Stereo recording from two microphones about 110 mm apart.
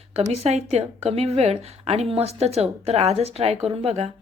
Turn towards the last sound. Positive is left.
turn(degrees=-70)  # may be behind; listen again after turning